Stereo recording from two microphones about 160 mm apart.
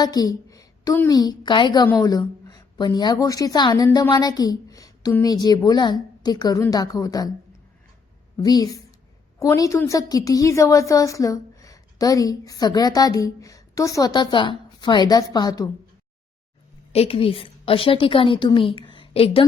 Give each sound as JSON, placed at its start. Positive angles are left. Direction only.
{"t": 0.0, "sound": "a woman's voice", "side_deg": 25}
{"t": 8.4, "sound": "a woman's voice", "side_deg": 25}
{"t": 16.9, "sound": "a woman's voice", "side_deg": 40}